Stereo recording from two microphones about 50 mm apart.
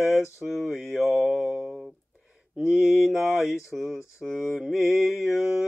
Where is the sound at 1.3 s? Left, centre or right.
Centre.